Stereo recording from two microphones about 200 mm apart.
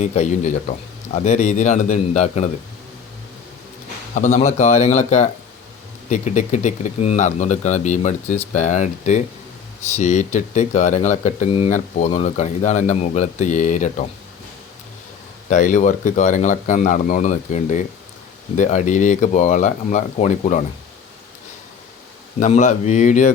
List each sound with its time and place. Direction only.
0.0 s speech: 35° left (ahead or behind)
4.1 s speech: 40° left (ahead or behind)
15.4 s speech: 40° left (ahead or behind)
22.4 s speech: 35° left (ahead or behind)